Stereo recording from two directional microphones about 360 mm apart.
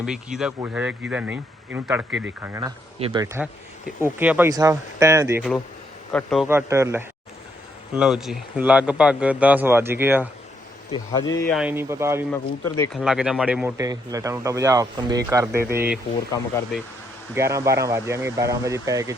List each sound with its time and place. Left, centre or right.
0.0 s speech: centre
10.9 s speech: centre
16.3 s speech: centre
17.3 s speech: centre